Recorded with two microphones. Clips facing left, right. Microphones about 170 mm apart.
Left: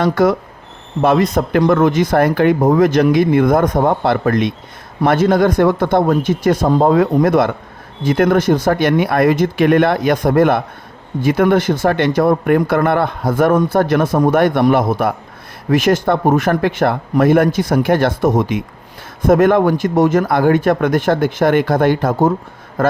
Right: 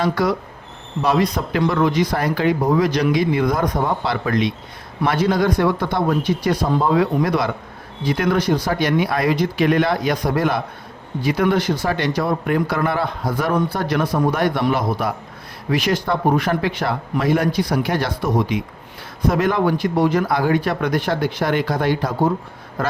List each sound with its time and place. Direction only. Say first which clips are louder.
0.0 s a man's voice: left 6 dB; 50° left (ahead or behind)